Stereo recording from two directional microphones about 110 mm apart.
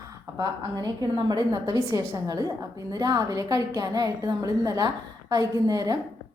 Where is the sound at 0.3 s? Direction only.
35° right (ahead or behind).